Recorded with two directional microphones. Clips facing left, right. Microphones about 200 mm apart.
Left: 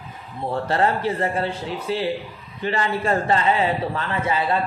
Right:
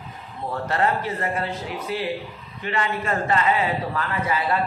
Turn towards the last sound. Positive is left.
turn(degrees=25)  # may be behind; listen again after turning